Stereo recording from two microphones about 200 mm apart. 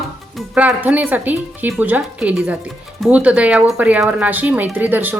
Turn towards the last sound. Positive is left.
turn(degrees=-10)  # may be behind; listen again after turning